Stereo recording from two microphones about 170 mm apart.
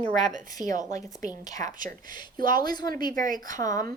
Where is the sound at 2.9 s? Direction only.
55° right (ahead or behind).